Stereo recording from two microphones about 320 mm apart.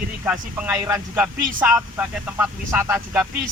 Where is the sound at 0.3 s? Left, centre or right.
Centre.